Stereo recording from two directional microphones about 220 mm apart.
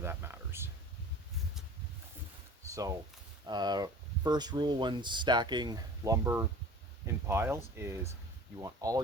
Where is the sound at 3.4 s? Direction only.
20° right (ahead or behind).